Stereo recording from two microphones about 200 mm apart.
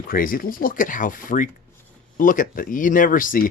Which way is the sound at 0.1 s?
45° left (ahead or behind).